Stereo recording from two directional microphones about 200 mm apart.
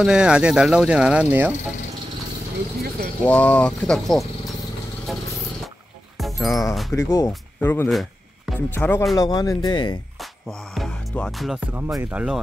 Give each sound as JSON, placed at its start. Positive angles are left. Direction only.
{"t": 0.0, "sound": "speech", "side_deg": -5}
{"t": 3.3, "sound": "speech", "side_deg": 5}
{"t": 6.1, "sound": "music", "side_deg": 0}
{"t": 6.7, "sound": "speech", "side_deg": 0}
{"t": 7.0, "sound": "speech", "side_deg": 15}
{"t": 7.9, "sound": "music", "side_deg": 0}
{"t": 8.7, "sound": "speech", "side_deg": 10}
{"t": 10.7, "sound": "speech", "side_deg": 0}